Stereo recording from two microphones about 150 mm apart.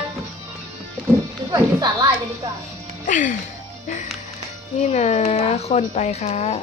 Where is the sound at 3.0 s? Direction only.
60° left (ahead or behind).